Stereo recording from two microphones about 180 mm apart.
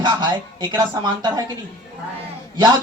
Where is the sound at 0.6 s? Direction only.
25° right (ahead or behind).